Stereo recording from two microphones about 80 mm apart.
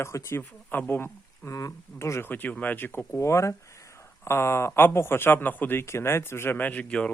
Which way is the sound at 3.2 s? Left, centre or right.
Left.